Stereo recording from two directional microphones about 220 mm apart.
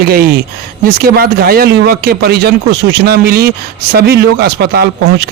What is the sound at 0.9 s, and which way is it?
A man's voice, 45° right (ahead or behind).